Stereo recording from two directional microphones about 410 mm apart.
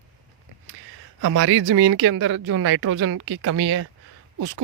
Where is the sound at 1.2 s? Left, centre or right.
Right.